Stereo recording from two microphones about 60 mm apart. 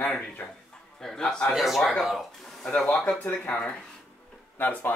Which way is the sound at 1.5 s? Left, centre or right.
Centre.